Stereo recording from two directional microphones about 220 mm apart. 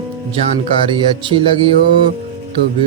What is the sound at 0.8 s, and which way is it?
Music, 20° right (ahead or behind).